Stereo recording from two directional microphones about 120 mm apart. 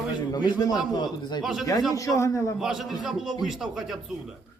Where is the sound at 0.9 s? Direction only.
35° left (ahead or behind).